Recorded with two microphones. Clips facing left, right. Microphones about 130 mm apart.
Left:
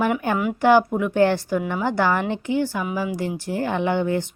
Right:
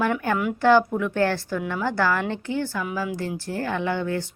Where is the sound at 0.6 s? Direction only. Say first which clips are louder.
Left 2 dB; 15° left (ahead or behind).